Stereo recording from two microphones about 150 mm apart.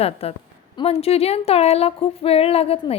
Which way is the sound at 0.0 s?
40° left (ahead or behind).